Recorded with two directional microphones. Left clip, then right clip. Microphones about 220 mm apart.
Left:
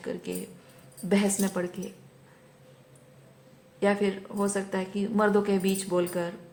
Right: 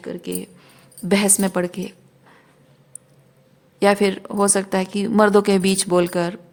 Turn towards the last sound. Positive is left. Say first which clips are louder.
# right 9 dB
turn(degrees=-50)  # may be behind; listen again after turning